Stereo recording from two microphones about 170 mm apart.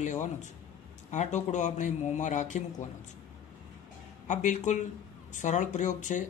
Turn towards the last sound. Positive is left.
turn(degrees=45)  # may be behind; listen again after turning